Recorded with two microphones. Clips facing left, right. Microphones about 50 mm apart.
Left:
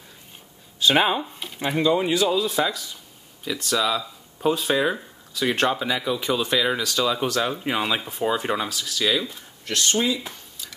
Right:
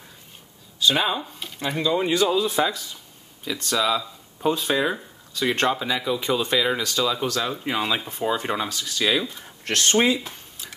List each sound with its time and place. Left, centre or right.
0.7 s speech: left
1.4 s speech: centre
2.0 s speech: centre
7.1 s speech: centre
9.7 s speech: right